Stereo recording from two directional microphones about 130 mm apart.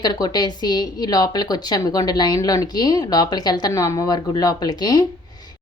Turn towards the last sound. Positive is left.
turn(degrees=30)  # may be behind; listen again after turning